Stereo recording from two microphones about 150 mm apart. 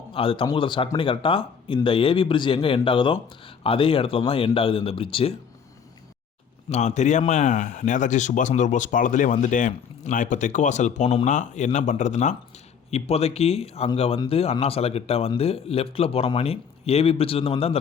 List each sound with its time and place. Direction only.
0.1 s a man's voice: 35° left (ahead or behind)
6.7 s a man's voice: 50° left (ahead or behind)